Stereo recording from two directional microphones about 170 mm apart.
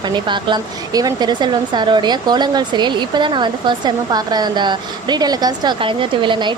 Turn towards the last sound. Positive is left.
turn(degrees=-30)  # may be behind; listen again after turning